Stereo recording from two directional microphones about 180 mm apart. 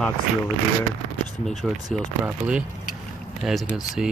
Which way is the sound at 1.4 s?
Centre (ahead or behind).